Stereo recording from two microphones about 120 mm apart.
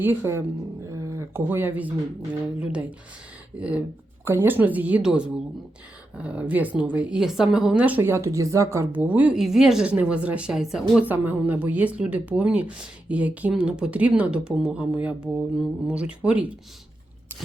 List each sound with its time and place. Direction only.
0.0 s a woman's voice: 20° right (ahead or behind)
0.9 s a sound: 25° right (ahead or behind)
3.6 s a woman's voice: 10° right (ahead or behind)
11.1 s a woman's voice: 15° right (ahead or behind)